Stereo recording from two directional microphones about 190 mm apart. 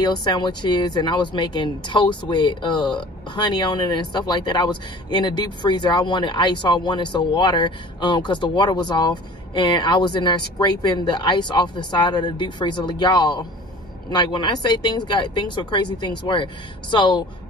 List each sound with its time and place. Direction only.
0.0 s speech: 20° left (ahead or behind)